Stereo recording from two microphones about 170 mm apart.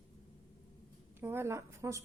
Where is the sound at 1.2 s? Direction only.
15° right (ahead or behind).